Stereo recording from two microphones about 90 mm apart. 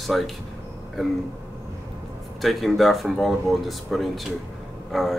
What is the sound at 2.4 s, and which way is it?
Speech, centre (ahead or behind).